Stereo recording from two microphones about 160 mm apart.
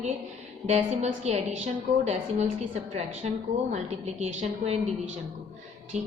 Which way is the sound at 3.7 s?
45° right (ahead or behind).